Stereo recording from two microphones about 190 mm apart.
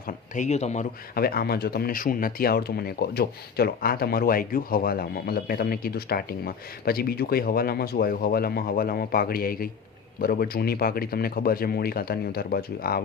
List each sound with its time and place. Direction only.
0.3 s speech: 35° left (ahead or behind)
1.1 s speech: 55° left (ahead or behind)